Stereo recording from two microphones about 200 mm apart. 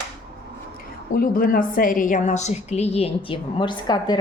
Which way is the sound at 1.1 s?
45° left (ahead or behind).